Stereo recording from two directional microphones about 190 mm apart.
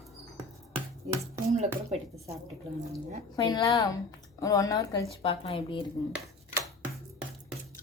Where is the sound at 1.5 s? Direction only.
35° right (ahead or behind).